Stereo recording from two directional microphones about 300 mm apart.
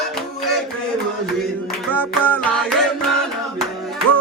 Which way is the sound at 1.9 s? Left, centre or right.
Centre.